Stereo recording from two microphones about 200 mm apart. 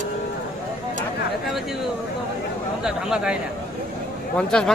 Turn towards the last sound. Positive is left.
turn(degrees=5)  # may be behind; listen again after turning